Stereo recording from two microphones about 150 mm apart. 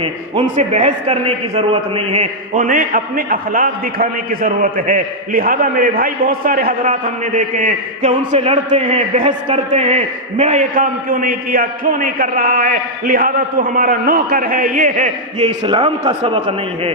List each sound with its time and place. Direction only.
0.4 s a man's voice: 50° right (ahead or behind)
2.5 s a man's voice: 65° right (ahead or behind)
15.4 s a man's voice: 35° right (ahead or behind)